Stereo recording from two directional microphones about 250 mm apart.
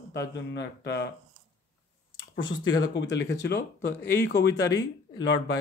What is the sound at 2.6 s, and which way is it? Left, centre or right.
A man's voice, left.